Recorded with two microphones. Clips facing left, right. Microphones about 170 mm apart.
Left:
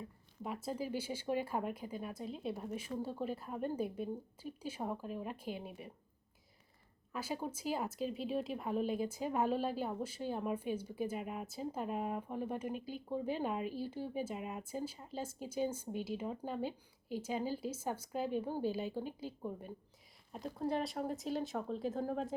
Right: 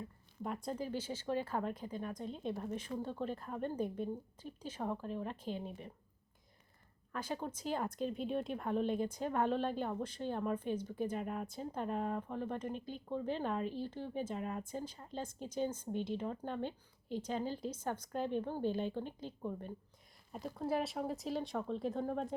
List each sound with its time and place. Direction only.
0.4 s speech: 5° left (ahead or behind)
7.1 s speech: 5° left (ahead or behind)
20.3 s speech: centre (ahead or behind)